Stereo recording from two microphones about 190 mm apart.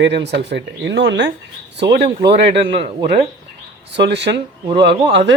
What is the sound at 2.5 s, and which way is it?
Speech, 30° right (ahead or behind).